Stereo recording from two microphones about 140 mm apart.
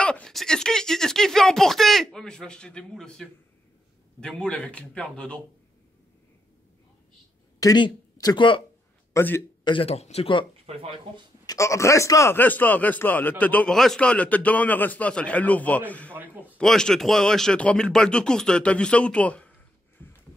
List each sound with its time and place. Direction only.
0.0 s a man's voice: 5° left (ahead or behind)
7.6 s speech: 30° left (ahead or behind)
9.1 s speech: 15° left (ahead or behind)
9.7 s speech: 40° left (ahead or behind)
10.7 s speech: 45° right (ahead or behind)
11.4 s a man's voice: 20° left (ahead or behind)
16.1 s a man's voice: 15° right (ahead or behind)
16.5 s speech: 5° left (ahead or behind)
20.0 s a sound: 15° left (ahead or behind)